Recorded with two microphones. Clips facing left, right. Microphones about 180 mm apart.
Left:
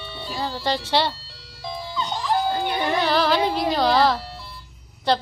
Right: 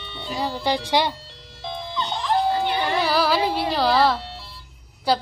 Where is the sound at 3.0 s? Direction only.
5° right (ahead or behind).